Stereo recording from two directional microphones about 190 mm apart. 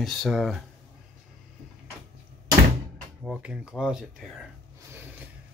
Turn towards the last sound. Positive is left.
turn(degrees=0)  # may be behind; listen again after turning